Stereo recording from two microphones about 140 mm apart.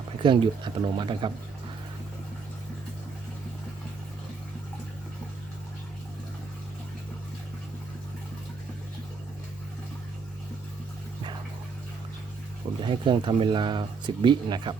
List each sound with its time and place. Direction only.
0.2 s speech: 35° right (ahead or behind)
12.8 s speech: 35° right (ahead or behind)